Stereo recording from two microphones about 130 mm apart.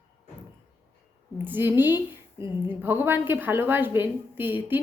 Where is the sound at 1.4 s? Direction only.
15° right (ahead or behind).